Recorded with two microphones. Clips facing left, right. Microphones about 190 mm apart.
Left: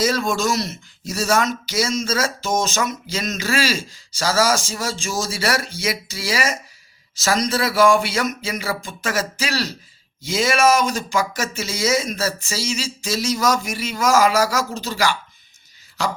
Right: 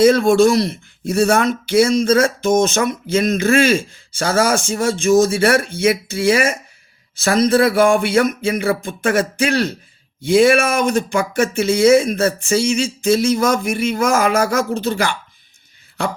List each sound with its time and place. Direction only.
0.0 s speech: 55° right (ahead or behind)